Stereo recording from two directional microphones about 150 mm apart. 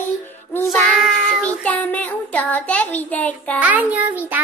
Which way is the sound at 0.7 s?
Centre (ahead or behind).